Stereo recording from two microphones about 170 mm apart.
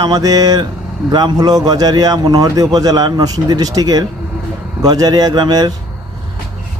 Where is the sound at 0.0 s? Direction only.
25° right (ahead or behind).